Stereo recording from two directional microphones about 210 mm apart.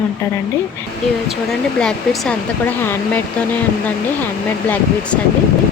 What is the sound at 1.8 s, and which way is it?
Speech, 5° left (ahead or behind).